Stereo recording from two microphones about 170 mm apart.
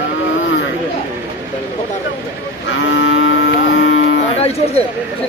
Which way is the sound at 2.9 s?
90° left.